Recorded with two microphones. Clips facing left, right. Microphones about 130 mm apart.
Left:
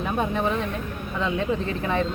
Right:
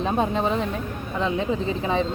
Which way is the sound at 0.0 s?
25° right (ahead or behind).